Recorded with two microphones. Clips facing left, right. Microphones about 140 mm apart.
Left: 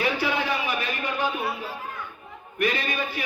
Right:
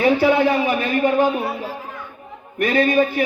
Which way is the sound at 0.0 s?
50° right (ahead or behind).